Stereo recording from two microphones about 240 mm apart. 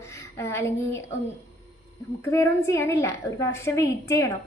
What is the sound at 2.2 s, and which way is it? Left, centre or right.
A woman's voice, centre.